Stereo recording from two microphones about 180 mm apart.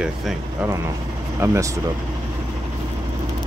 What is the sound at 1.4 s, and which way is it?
Speech, 15° right (ahead or behind).